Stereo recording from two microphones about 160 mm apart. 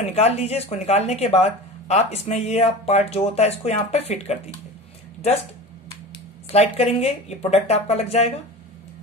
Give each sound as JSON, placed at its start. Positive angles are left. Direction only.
{"t": 0.1, "sound": "a woman's voice", "side_deg": 40}
{"t": 6.5, "sound": "a woman's voice", "side_deg": 40}